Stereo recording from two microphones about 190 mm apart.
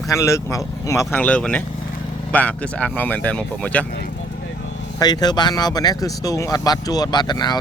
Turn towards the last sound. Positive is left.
turn(degrees=20)  # may be behind; listen again after turning